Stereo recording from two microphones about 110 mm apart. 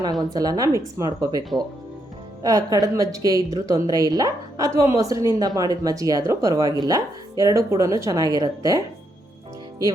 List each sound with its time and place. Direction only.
0.3 s speech: 35° right (ahead or behind)